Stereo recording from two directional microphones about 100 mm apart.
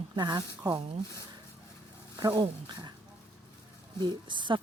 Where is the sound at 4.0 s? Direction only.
50° right (ahead or behind).